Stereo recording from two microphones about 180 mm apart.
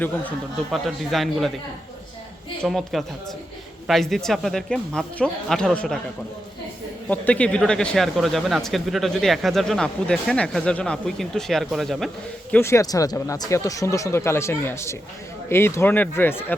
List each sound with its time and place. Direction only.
0.0 s speech: 5° left (ahead or behind)
2.6 s speech: centre (ahead or behind)
7.1 s speech: 10° left (ahead or behind)
12.5 s speech: 15° left (ahead or behind)